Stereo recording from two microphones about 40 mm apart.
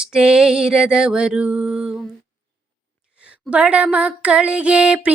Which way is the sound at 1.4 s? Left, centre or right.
Right.